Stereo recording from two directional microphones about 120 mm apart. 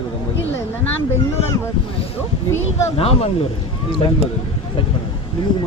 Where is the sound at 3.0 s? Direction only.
55° left (ahead or behind).